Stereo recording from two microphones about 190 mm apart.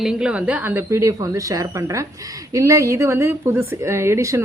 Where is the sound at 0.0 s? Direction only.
5° right (ahead or behind).